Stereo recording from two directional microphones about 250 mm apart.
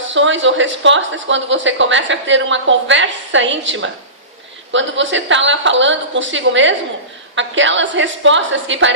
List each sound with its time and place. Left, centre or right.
0.1 s a woman's voice: right